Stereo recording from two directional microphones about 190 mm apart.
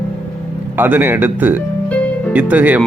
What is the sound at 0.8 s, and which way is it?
Speech, 10° right (ahead or behind).